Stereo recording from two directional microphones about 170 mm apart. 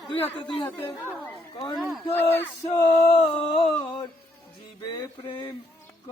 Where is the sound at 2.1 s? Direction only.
10° left (ahead or behind).